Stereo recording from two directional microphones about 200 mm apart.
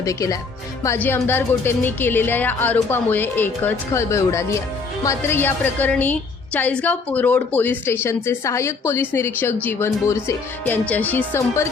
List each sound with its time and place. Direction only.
0.0 s a woman's voice: 15° left (ahead or behind)